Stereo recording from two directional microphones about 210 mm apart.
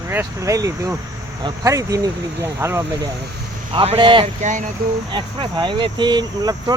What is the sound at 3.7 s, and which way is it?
Speech, 25° right (ahead or behind).